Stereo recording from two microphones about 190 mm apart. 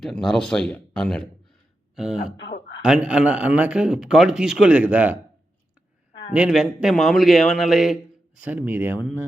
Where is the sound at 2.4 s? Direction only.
65° left (ahead or behind).